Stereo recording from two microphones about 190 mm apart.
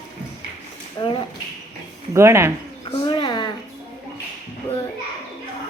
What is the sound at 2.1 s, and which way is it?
Speech, 15° right (ahead or behind).